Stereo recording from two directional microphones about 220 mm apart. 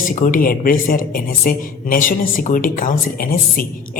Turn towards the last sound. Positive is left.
turn(degrees=40)  # may be behind; listen again after turning